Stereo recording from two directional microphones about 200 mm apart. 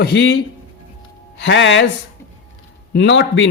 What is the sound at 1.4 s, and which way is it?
Speech, 65° left (ahead or behind).